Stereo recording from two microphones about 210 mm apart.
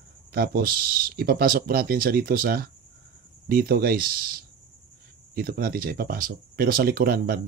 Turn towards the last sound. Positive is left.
turn(degrees=-45)  # may be behind; listen again after turning